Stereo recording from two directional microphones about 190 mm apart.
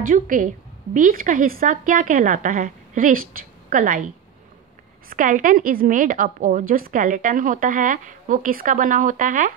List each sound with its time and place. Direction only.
0.0 s a woman's voice: 45° right (ahead or behind)
5.1 s a woman's voice: 45° right (ahead or behind)